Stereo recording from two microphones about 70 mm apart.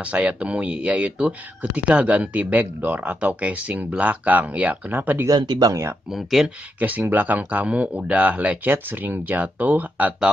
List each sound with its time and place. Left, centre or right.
0.0 s speech: centre
5.3 s speech: right
6.0 s speech: centre
6.8 s speech: right